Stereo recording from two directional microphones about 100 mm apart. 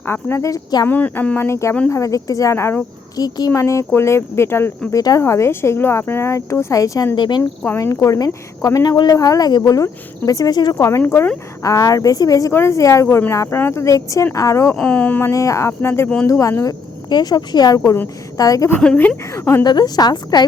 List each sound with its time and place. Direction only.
0.0 s speech: 25° left (ahead or behind)
0.9 s speech: 20° left (ahead or behind)
1.5 s speech: 30° left (ahead or behind)
3.2 s speech: 40° left (ahead or behind)
7.2 s speech: 45° left (ahead or behind)
7.8 s speech: 30° left (ahead or behind)
11.6 s speech: 35° left (ahead or behind)
14.8 s speech: 10° left (ahead or behind)
15.3 s speech: 30° left (ahead or behind)
17.1 s speech: 45° left (ahead or behind)
18.8 s speech: 15° left (ahead or behind)
19.3 s speech: 30° left (ahead or behind)
19.6 s speech: 45° left (ahead or behind)